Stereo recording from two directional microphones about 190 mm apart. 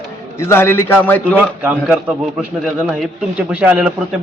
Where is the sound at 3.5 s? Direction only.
5° right (ahead or behind).